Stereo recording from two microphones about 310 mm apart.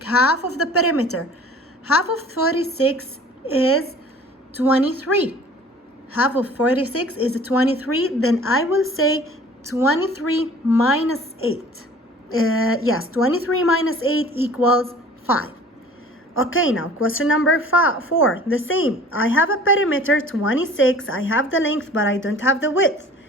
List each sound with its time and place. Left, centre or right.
0.0 s a woman's voice: left
6.4 s a woman's voice: left